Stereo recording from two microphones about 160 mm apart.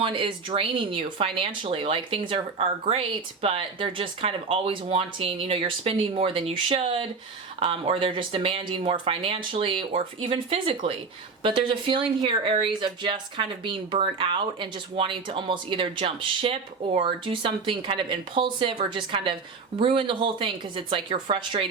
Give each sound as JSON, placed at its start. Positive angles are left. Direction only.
{"t": 0.0, "sound": "speech", "side_deg": -30}